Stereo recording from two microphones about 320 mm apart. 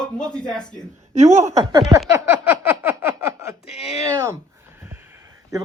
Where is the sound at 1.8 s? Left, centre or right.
Centre.